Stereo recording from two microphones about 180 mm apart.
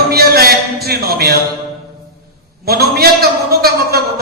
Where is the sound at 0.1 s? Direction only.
60° right (ahead or behind).